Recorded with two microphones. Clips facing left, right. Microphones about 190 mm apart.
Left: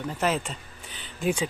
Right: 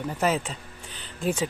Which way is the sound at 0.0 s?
10° right (ahead or behind).